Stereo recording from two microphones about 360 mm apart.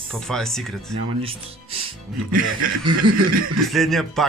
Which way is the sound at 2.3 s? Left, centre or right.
Right.